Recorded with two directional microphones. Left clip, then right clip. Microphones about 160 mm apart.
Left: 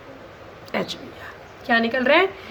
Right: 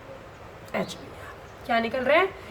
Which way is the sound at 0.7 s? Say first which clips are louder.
Left 4 dB; 35° left (ahead or behind).